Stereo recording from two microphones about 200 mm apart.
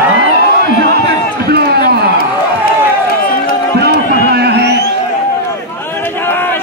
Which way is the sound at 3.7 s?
55° right (ahead or behind).